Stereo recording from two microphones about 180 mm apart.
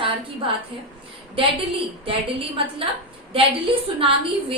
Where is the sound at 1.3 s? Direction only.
30° right (ahead or behind).